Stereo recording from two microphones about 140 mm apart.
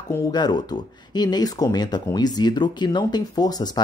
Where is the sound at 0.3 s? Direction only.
30° left (ahead or behind).